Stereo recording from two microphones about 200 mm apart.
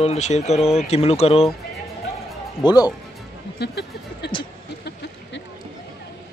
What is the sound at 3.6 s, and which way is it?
Speech, 55° left (ahead or behind).